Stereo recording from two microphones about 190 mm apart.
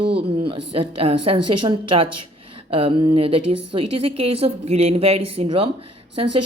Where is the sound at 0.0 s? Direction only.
60° right (ahead or behind).